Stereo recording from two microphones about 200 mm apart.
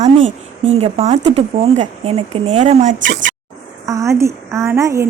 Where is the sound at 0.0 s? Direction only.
35° right (ahead or behind).